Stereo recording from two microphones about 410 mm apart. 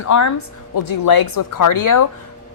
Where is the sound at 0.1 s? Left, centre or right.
Left.